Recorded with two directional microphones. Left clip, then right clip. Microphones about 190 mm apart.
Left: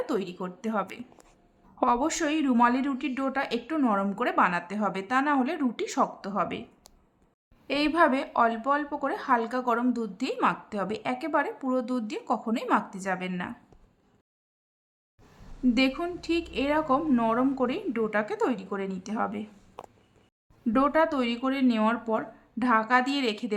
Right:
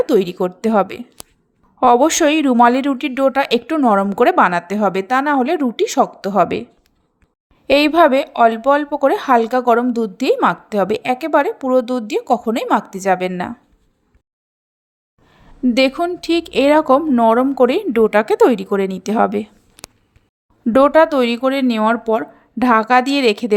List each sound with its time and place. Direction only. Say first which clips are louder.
0.0 s a woman's voice: right 16 dB; 35° right (ahead or behind)
7.7 s a woman's voice: right 12 dB; 40° right (ahead or behind)
15.6 s a woman's voice: right 11 dB; 40° right (ahead or behind)
20.7 s a woman's voice: right 13 dB; 40° right (ahead or behind)